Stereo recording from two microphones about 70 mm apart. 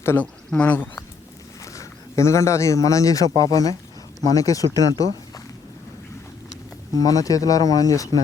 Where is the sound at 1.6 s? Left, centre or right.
Left.